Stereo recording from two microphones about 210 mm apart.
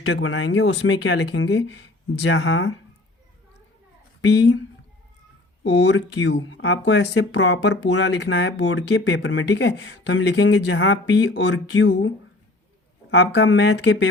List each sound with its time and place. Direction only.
0.0 s speech: 70° left (ahead or behind)
4.2 s speech: 55° left (ahead or behind)
5.6 s speech: 60° left (ahead or behind)